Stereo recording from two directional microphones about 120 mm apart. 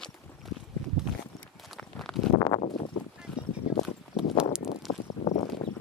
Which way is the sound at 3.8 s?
5° right (ahead or behind).